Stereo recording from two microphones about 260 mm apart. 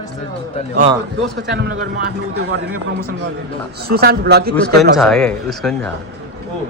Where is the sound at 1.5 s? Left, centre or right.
Right.